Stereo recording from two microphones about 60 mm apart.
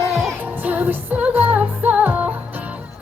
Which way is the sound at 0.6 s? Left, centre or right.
Right.